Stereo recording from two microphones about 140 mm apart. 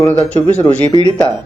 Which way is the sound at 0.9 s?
35° left (ahead or behind).